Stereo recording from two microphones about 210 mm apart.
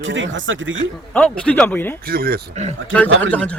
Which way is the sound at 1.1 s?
5° left (ahead or behind).